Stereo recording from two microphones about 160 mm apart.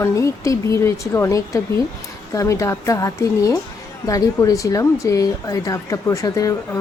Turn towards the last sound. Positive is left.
turn(degrees=20)  # may be behind; listen again after turning